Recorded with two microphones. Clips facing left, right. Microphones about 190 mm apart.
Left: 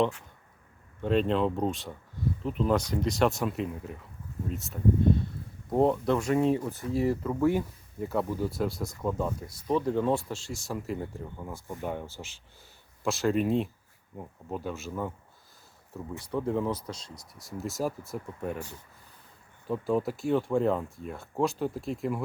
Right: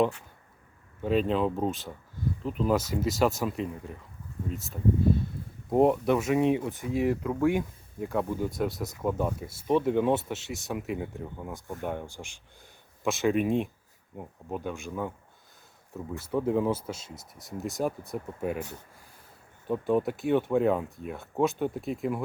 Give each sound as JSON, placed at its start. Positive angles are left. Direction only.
{"t": 1.0, "sound": "speech", "side_deg": -5}
{"t": 5.7, "sound": "speech", "side_deg": -15}
{"t": 7.2, "sound": "speech", "side_deg": -5}
{"t": 9.5, "sound": "speech", "side_deg": -25}
{"t": 10.7, "sound": "speech", "side_deg": -5}
{"t": 12.0, "sound": "speech", "side_deg": -15}
{"t": 13.1, "sound": "speech", "side_deg": 0}
{"t": 13.3, "sound": "speech", "side_deg": -55}
{"t": 14.6, "sound": "speech", "side_deg": 5}
{"t": 15.9, "sound": "speech", "side_deg": 0}
{"t": 16.5, "sound": "speech", "side_deg": -10}
{"t": 16.9, "sound": "speech", "side_deg": -25}
{"t": 17.3, "sound": "speech", "side_deg": 0}